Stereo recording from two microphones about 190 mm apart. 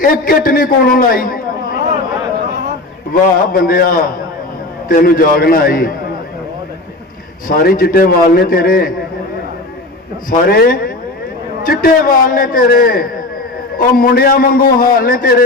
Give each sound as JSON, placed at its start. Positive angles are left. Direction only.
{"t": 0.0, "sound": "a man's voice", "side_deg": 50}
{"t": 3.1, "sound": "a man's voice", "side_deg": 50}
{"t": 7.4, "sound": "a man's voice", "side_deg": 50}
{"t": 10.2, "sound": "a man's voice", "side_deg": 50}